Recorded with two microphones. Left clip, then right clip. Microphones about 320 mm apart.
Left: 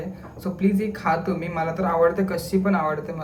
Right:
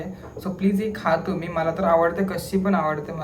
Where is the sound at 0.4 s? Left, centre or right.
Centre.